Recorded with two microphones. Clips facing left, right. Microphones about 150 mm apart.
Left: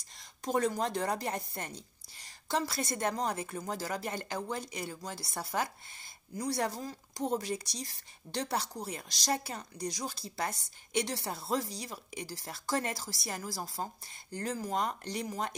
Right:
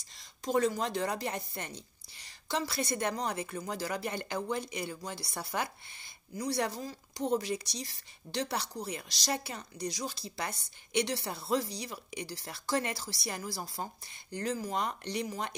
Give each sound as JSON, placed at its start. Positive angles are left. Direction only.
{"t": 0.2, "sound": "a woman's voice", "side_deg": 55}